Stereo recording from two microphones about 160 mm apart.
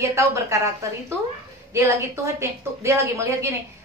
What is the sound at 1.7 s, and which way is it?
A woman's voice, 15° right (ahead or behind).